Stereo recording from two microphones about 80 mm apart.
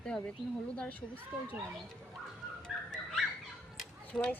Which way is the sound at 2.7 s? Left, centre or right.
Centre.